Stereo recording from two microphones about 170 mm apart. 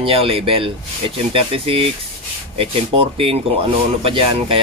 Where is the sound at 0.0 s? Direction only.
35° right (ahead or behind).